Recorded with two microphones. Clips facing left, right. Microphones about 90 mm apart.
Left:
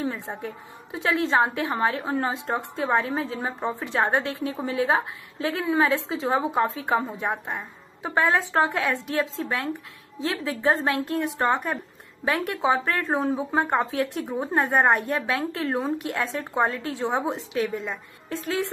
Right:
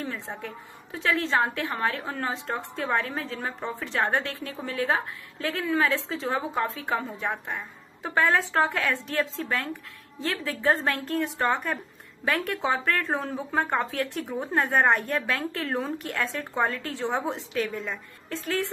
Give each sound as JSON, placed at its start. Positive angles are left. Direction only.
{"t": 0.0, "sound": "a woman's voice", "side_deg": 20}
{"t": 8.0, "sound": "speech", "side_deg": 5}
{"t": 10.7, "sound": "speech", "side_deg": 5}
{"t": 13.4, "sound": "speech", "side_deg": 15}
{"t": 13.7, "sound": "speech", "side_deg": 5}
{"t": 18.4, "sound": "speech", "side_deg": 0}